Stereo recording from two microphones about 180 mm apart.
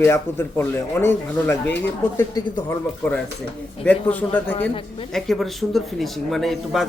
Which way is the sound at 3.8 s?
10° left (ahead or behind).